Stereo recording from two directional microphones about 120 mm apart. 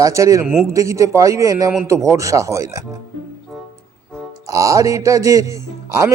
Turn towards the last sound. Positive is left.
turn(degrees=-25)  # may be behind; listen again after turning